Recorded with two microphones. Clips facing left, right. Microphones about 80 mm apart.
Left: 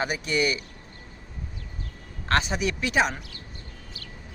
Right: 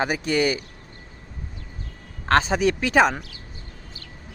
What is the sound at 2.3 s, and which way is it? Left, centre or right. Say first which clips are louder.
Speech: right 6 dB; right.